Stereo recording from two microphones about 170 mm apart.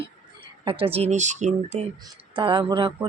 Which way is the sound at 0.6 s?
30° right (ahead or behind).